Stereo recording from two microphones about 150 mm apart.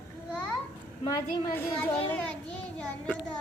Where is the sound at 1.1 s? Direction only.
20° left (ahead or behind).